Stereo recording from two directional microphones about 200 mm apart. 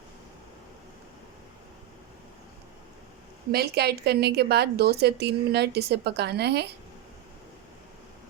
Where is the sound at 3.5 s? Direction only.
55° right (ahead or behind).